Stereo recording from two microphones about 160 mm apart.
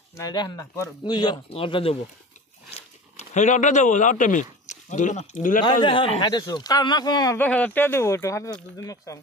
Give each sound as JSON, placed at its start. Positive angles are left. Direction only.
{"t": 0.1, "sound": "speech", "side_deg": 25}
{"t": 2.7, "sound": "speech", "side_deg": 45}
{"t": 5.7, "sound": "speech", "side_deg": 30}
{"t": 7.3, "sound": "speech", "side_deg": 10}